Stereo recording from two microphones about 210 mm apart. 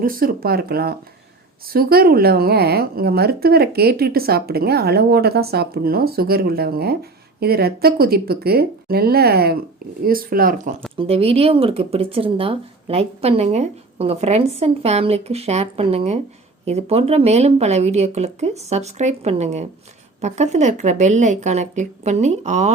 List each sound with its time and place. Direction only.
0.0 s a woman's voice: 45° right (ahead or behind)
10.9 s speech: 25° right (ahead or behind)